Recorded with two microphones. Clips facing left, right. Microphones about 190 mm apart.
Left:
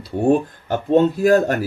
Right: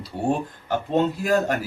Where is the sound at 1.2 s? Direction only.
50° left (ahead or behind).